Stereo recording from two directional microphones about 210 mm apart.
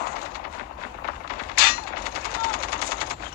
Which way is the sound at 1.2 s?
45° left (ahead or behind).